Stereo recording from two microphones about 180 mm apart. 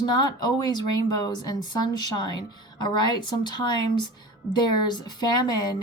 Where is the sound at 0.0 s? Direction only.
25° left (ahead or behind).